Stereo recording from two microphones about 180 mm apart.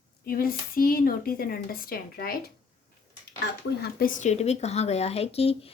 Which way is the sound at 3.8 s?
55° left (ahead or behind).